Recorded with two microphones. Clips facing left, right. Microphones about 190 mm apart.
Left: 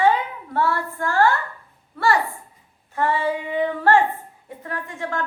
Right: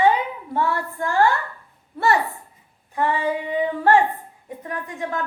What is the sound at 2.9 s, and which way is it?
A woman's voice, 15° right (ahead or behind).